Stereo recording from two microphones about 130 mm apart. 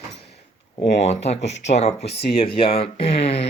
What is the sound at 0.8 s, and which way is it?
Speech, 60° left (ahead or behind).